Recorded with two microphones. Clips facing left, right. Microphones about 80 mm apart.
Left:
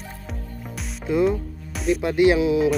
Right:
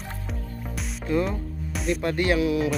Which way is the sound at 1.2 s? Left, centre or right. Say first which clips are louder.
Left 7 dB; centre.